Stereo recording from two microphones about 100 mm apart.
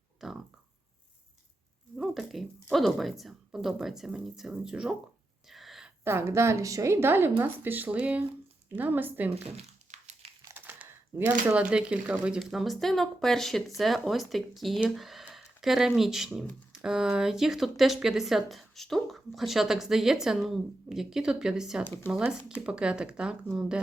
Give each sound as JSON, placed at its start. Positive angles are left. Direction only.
{"t": 0.2, "sound": "speech", "side_deg": -5}
{"t": 2.0, "sound": "speech", "side_deg": 0}
{"t": 5.5, "sound": "a sound", "side_deg": 0}
{"t": 6.1, "sound": "a woman's voice", "side_deg": -25}
{"t": 10.5, "sound": "crumpling", "side_deg": -15}
{"t": 11.3, "sound": "speech", "side_deg": -15}